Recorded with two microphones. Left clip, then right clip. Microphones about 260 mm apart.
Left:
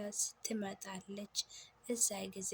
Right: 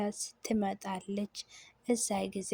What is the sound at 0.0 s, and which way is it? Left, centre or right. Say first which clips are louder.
A woman's voice: right 5 dB; right.